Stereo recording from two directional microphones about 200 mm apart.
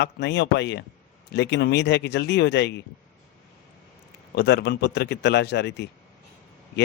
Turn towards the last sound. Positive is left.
turn(degrees=60)  # may be behind; listen again after turning